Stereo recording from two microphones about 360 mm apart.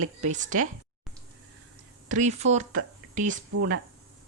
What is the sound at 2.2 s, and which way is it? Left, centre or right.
Speech, centre.